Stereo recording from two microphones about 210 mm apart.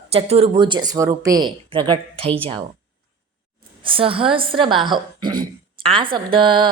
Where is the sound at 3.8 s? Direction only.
25° right (ahead or behind).